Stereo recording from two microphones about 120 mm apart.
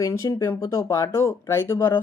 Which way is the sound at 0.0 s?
30° left (ahead or behind).